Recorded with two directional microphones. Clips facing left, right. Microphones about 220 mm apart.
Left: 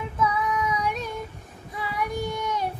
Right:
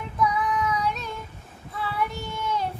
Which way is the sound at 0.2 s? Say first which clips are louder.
Right 1 dB; 10° left (ahead or behind).